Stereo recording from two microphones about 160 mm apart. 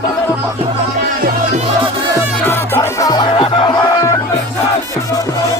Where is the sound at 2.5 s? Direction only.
15° left (ahead or behind); by 3.9 s 30° left (ahead or behind).